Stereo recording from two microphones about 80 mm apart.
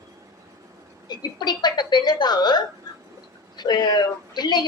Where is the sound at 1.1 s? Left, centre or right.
Left.